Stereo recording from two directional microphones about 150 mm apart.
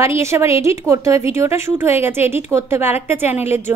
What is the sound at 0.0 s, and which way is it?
A woman's voice, 20° right (ahead or behind).